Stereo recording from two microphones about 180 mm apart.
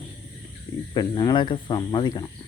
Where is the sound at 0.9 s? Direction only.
20° left (ahead or behind).